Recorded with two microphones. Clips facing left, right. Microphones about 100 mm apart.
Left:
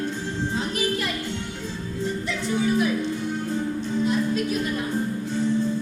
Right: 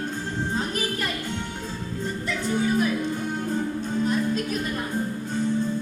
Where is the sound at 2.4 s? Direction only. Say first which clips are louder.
Left 1 dB; 45° right (ahead or behind).